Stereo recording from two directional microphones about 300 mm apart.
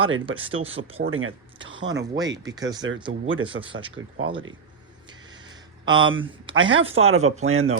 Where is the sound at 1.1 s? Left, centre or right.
Right.